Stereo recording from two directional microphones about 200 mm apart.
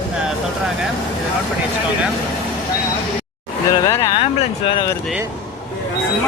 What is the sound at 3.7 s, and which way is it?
Speech, 15° left (ahead or behind).